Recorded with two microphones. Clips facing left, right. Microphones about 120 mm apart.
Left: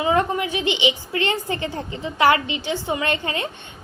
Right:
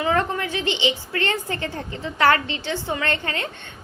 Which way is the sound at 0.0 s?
15° left (ahead or behind).